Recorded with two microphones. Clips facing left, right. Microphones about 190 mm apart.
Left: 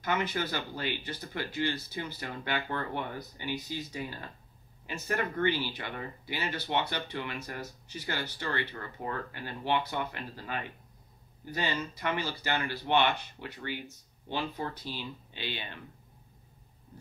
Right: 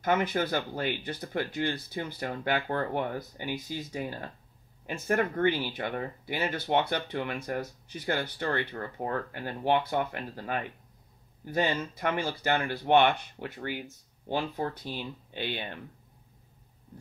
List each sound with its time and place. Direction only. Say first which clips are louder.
0.0 s speech: right 4 dB; 50° right (ahead or behind)